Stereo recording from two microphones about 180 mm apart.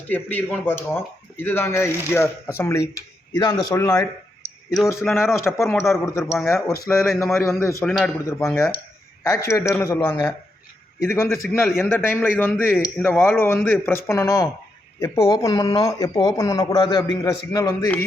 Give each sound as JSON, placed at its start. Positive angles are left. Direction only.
{"t": 0.1, "sound": "speech", "side_deg": 10}
{"t": 6.8, "sound": "a man's voice", "side_deg": 0}
{"t": 7.4, "sound": "speech", "side_deg": 15}
{"t": 7.9, "sound": "a man's voice", "side_deg": 5}
{"t": 8.4, "sound": "speech", "side_deg": 15}
{"t": 11.4, "sound": "a man's voice", "side_deg": 5}